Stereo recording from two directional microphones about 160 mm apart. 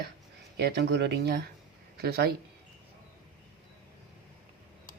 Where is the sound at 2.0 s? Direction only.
80° right.